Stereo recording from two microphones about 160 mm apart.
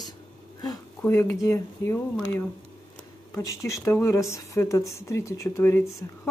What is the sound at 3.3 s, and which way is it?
Speech, 20° left (ahead or behind).